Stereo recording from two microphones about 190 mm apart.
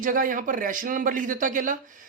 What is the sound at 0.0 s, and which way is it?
A man's voice, 45° right (ahead or behind).